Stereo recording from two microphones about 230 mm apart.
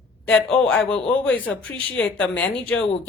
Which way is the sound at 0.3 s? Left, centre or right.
Centre.